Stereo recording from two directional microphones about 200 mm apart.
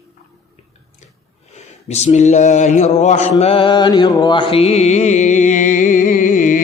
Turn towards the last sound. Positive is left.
turn(degrees=40)  # may be behind; listen again after turning